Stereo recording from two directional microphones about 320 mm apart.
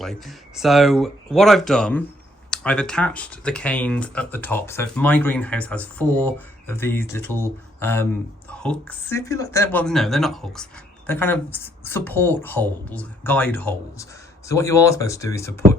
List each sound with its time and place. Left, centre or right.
0.0 s speech: centre